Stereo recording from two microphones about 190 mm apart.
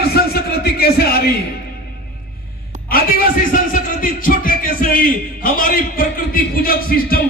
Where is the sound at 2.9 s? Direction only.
50° left (ahead or behind).